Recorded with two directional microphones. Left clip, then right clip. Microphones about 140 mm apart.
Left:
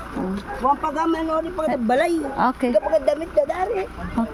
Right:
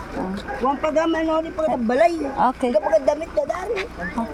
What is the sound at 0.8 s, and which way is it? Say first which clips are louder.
Speech: right 2 dB; 50° left (ahead or behind).